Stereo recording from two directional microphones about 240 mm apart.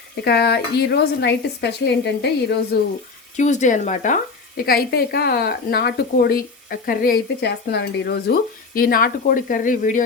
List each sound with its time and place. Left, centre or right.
0.3 s speech: left
3.3 s speech: left